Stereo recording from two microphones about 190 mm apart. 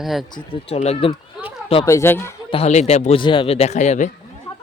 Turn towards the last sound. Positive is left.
turn(degrees=40)  # may be behind; listen again after turning